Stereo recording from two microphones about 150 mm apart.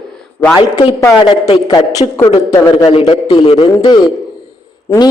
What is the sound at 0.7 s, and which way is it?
Speech, 25° left (ahead or behind).